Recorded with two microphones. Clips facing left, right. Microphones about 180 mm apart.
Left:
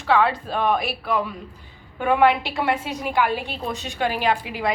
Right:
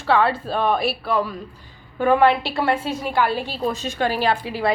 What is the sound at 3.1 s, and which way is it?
A woman's voice, 15° left (ahead or behind).